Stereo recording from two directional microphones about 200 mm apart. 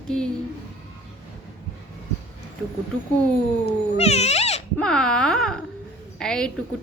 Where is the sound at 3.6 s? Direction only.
30° left (ahead or behind).